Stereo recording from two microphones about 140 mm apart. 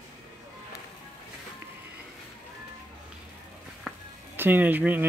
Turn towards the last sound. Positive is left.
turn(degrees=-15)  # may be behind; listen again after turning